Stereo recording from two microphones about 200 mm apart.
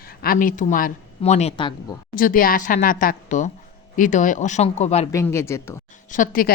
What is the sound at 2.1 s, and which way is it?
Speech, 45° left (ahead or behind).